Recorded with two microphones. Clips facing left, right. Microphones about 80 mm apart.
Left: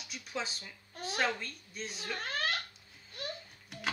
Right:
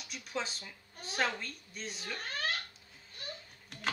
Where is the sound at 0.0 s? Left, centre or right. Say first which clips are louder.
Right 1 dB; centre.